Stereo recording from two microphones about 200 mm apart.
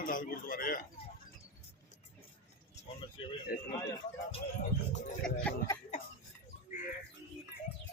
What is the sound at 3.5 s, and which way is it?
Speech, 45° left (ahead or behind).